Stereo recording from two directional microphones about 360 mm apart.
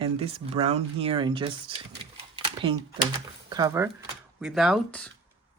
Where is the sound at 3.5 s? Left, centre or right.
Centre.